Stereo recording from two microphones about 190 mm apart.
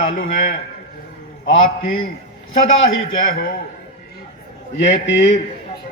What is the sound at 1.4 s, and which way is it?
Speech, 90° left.